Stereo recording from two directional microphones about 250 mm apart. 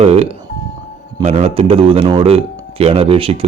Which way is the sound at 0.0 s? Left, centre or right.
Right.